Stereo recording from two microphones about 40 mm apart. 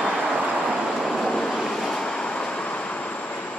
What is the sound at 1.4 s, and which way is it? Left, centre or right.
Vehicle, centre.